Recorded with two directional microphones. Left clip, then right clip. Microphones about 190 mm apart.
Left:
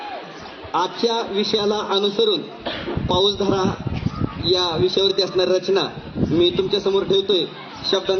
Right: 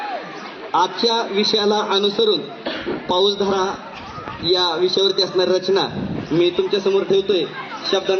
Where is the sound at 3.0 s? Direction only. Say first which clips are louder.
Right 1 dB; 5° right (ahead or behind).